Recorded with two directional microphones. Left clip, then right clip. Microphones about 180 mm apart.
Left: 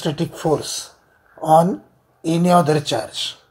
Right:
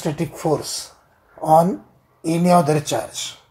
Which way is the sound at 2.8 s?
15° left (ahead or behind).